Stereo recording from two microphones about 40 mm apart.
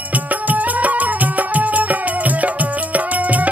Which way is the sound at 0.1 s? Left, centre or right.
Right.